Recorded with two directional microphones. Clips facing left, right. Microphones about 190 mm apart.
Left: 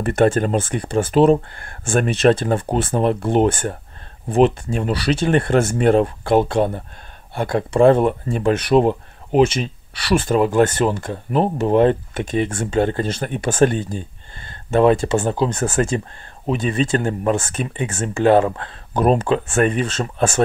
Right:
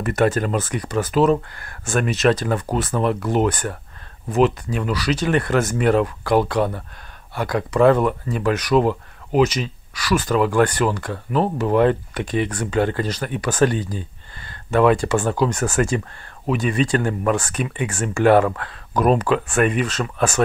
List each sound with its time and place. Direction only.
0.0 s speech: 30° left (ahead or behind)